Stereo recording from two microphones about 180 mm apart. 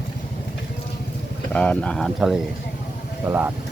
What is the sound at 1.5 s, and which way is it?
Speech, 5° left (ahead or behind).